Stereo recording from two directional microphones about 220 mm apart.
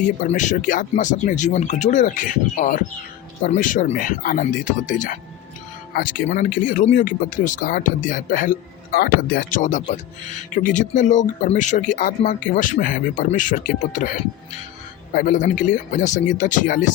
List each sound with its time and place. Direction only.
0.2 s speech: 35° left (ahead or behind)
15.1 s speech: 35° left (ahead or behind)